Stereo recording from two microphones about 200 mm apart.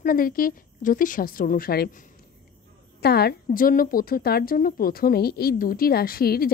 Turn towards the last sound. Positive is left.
turn(degrees=50)  # may be behind; listen again after turning